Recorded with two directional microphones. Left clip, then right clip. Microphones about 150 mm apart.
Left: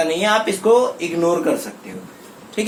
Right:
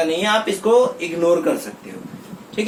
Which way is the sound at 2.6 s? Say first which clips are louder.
Left 1 dB; 70° left (ahead or behind).